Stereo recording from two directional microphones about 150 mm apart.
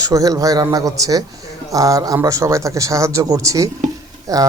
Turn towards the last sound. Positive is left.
turn(degrees=-25)  # may be behind; listen again after turning